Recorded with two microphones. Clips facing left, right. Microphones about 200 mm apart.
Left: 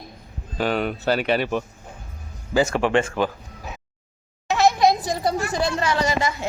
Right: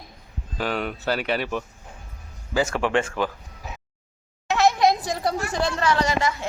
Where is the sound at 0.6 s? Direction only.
25° left (ahead or behind).